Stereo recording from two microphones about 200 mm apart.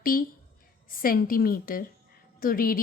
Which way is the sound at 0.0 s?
45° left (ahead or behind).